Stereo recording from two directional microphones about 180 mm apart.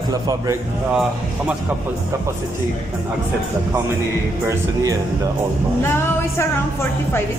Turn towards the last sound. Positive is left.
turn(degrees=15)  # may be behind; listen again after turning